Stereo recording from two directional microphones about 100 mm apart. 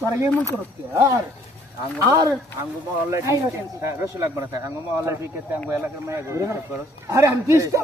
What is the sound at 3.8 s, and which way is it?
Speech, 30° right (ahead or behind).